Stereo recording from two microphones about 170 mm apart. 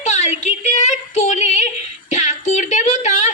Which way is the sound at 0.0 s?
45° left (ahead or behind).